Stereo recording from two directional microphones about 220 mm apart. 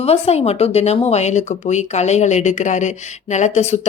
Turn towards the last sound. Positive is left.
turn(degrees=30)  # may be behind; listen again after turning